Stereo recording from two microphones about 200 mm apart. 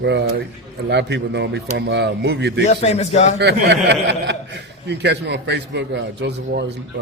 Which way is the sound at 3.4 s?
60° right (ahead or behind).